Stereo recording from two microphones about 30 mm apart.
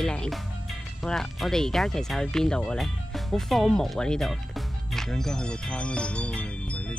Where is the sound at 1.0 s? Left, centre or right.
Centre.